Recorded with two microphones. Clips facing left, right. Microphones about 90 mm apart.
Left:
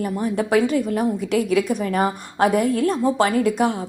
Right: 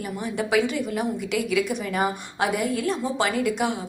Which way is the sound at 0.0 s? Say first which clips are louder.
Left 6 dB; 40° left (ahead or behind).